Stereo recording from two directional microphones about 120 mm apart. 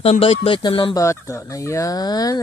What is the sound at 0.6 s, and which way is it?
Speech, 40° left (ahead or behind).